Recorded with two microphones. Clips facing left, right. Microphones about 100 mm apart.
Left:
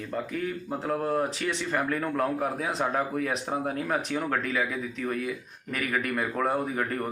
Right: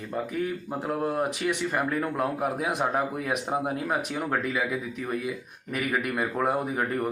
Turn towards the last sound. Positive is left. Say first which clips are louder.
# right 1 dB
turn(degrees=-10)  # may be behind; listen again after turning